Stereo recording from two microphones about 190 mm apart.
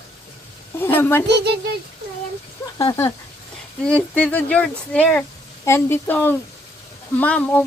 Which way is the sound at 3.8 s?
5° left (ahead or behind).